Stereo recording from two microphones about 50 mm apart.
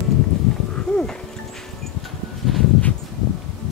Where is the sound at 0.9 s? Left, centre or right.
Centre.